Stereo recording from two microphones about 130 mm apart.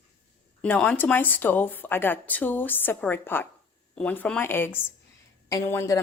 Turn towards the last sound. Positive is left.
turn(degrees=25)  # may be behind; listen again after turning